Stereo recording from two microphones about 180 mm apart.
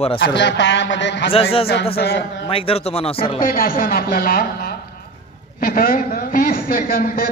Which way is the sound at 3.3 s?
50° left (ahead or behind).